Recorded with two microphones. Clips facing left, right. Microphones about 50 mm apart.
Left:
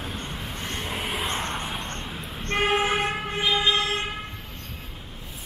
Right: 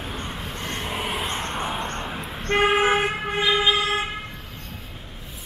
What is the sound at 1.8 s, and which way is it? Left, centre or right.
Vehicle, centre.